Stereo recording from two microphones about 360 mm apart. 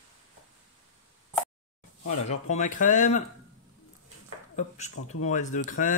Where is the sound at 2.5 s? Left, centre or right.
Left.